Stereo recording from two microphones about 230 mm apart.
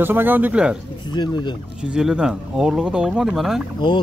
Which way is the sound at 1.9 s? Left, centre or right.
Centre.